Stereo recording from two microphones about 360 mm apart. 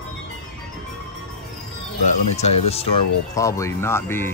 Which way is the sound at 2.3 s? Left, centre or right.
Centre.